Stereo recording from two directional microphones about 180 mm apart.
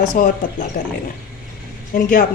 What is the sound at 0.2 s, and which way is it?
Speech, 50° left (ahead or behind).